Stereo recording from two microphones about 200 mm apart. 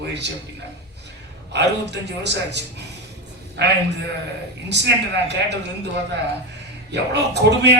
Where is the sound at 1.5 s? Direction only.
60° right (ahead or behind).